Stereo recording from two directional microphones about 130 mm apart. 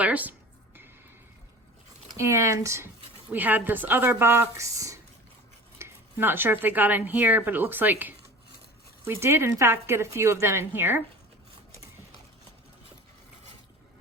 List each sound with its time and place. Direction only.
0.0 s speech: 10° right (ahead or behind)
2.1 s a woman's voice: 20° right (ahead or behind)